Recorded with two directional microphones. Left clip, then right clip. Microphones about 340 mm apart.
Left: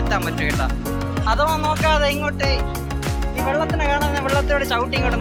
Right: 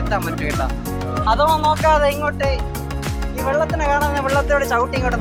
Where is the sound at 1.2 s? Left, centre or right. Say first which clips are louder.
Right 4 dB; left.